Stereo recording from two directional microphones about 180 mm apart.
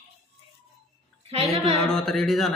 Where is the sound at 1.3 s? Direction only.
30° right (ahead or behind).